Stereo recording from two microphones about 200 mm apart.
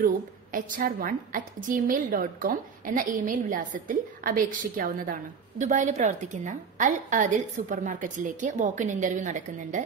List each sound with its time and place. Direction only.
0.0 s a woman's voice: 45° right (ahead or behind)